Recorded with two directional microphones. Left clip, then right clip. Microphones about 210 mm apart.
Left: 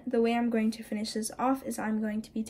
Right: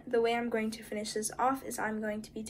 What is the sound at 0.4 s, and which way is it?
A woman's voice, 45° left (ahead or behind).